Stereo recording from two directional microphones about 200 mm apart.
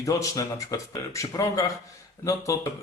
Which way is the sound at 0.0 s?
15° left (ahead or behind).